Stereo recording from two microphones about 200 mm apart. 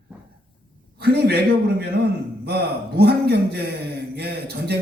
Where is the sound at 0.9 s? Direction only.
50° right (ahead or behind).